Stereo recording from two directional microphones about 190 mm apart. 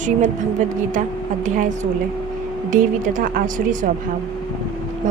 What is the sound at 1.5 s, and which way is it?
A woman's voice, 40° right (ahead or behind).